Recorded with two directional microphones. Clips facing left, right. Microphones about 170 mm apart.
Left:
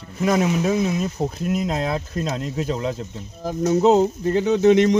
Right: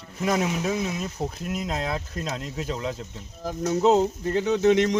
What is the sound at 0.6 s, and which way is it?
Speech, 50° left (ahead or behind).